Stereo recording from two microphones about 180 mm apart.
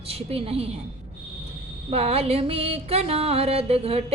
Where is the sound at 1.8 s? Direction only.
35° right (ahead or behind).